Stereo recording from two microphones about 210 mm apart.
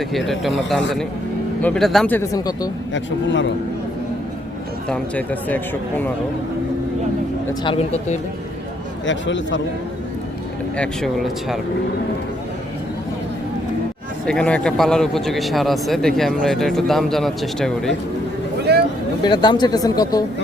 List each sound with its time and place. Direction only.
0.0 s a man's voice: centre (ahead or behind); by 2.6 s 20° left (ahead or behind)
4.9 s speech: 5° left (ahead or behind)
7.6 s speech: 25° left (ahead or behind)
9.0 s speech: 60° left (ahead or behind)
10.8 s a man's voice: centre (ahead or behind)
14.3 s a man's voice: 5° left (ahead or behind)
18.7 s a sound: 50° right (ahead or behind)
19.2 s speech: 20° left (ahead or behind)